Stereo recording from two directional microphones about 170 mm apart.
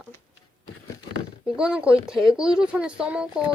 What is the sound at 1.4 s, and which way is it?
Speech, 5° right (ahead or behind).